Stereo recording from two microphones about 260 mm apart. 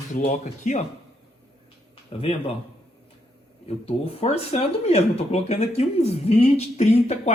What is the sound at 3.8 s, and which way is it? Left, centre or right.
A man's voice, left.